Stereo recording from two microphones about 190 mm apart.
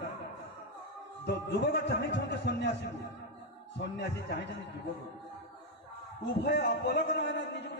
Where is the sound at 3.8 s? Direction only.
65° left (ahead or behind).